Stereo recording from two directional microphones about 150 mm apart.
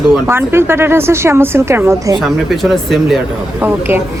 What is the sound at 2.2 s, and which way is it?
Speech, centre (ahead or behind).